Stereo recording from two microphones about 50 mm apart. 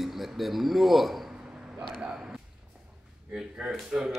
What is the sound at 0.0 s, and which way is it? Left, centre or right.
Speech, centre.